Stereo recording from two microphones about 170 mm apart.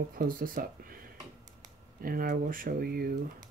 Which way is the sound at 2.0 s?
60° right (ahead or behind).